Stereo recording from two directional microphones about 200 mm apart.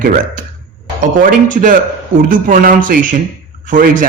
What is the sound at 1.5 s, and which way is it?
A man's voice, 40° right (ahead or behind).